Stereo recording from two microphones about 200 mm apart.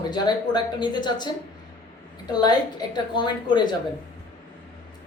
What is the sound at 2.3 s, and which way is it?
Speech, 20° left (ahead or behind).